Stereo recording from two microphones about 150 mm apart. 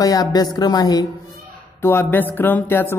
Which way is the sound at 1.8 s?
15° left (ahead or behind).